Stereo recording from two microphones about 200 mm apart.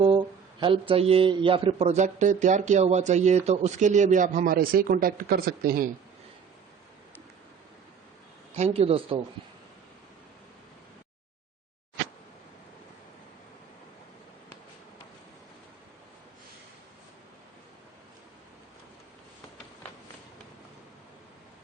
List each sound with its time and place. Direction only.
0.0 s speech: 25° right (ahead or behind); by 5.9 s 45° right (ahead or behind)
8.5 s a man's voice: 30° right (ahead or behind)